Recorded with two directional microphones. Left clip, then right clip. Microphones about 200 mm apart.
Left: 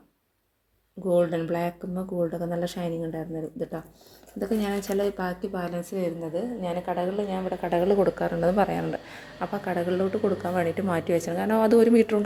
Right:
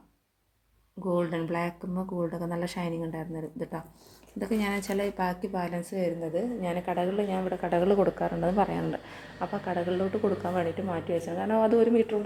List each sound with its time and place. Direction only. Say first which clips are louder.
1.0 s speech: left 6 dB; centre (ahead or behind)
10.8 s a woman's voice: left 5 dB; 25° left (ahead or behind)